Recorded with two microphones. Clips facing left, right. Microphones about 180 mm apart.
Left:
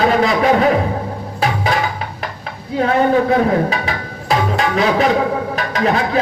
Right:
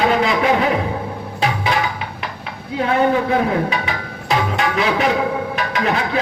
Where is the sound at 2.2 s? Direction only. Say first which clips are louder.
Left 2 dB; 40° left (ahead or behind).